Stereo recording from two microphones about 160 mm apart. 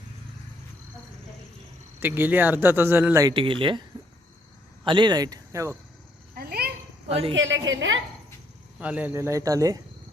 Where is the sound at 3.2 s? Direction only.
30° right (ahead or behind).